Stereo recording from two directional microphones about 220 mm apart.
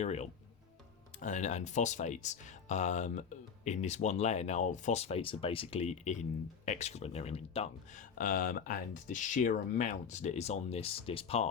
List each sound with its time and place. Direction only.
0.0 s speech: 30° left (ahead or behind)